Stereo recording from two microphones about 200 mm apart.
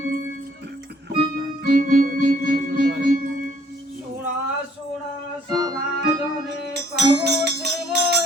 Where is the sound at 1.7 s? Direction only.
40° right (ahead or behind).